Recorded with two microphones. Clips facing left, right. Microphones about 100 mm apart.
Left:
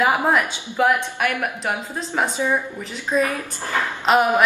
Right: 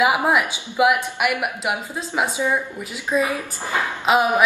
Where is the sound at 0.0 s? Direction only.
15° right (ahead or behind).